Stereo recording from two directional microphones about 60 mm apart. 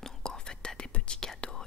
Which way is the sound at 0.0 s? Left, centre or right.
Centre.